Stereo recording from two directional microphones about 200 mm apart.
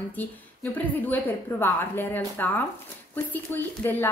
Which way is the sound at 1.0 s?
10° left (ahead or behind).